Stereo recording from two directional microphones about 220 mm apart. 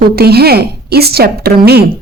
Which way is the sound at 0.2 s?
45° right (ahead or behind).